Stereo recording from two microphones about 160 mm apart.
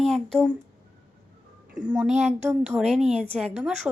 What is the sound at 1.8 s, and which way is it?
A woman's voice, 5° right (ahead or behind).